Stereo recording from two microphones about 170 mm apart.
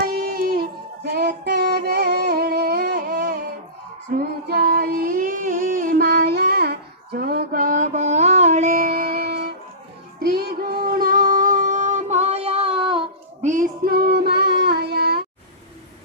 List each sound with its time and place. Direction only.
0.0 s music: 65° right (ahead or behind)
4.2 s singing: 65° right (ahead or behind)
6.0 s child singing: 65° right (ahead or behind)
10.2 s music: 65° right (ahead or behind); by 13.0 s 30° right (ahead or behind)
13.4 s music: 45° right (ahead or behind); by 14.5 s 70° right (ahead or behind)
14.6 s a sound: 70° right (ahead or behind)